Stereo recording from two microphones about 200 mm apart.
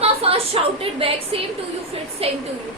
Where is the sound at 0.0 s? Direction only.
30° right (ahead or behind).